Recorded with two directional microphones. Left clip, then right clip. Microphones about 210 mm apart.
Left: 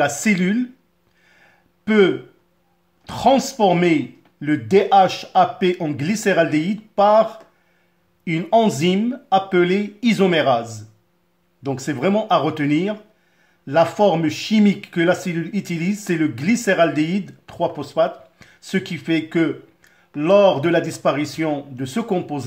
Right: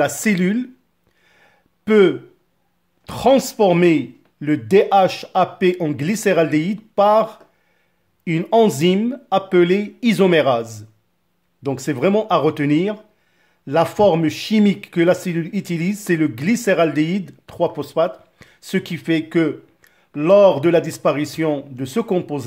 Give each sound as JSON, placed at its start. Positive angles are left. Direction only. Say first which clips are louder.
{"t": 0.0, "sound": "speech", "louder": "even", "side_deg": -45}
{"t": 1.2, "sound": "a sound", "louder": "left 1 dB", "side_deg": -45}
{"t": 3.1, "sound": "speech", "louder": "right 1 dB", "side_deg": -45}